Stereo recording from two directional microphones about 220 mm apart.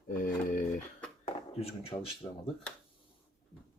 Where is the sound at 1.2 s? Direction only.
25° left (ahead or behind).